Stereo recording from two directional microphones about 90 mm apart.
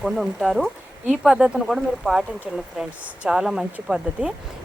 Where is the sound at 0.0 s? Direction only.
Centre (ahead or behind).